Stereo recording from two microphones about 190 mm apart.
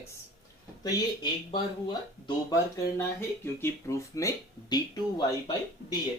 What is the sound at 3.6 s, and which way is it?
Speech, 15° left (ahead or behind).